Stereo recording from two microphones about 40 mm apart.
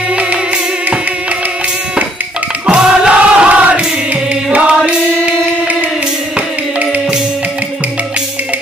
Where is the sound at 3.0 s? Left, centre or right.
Right.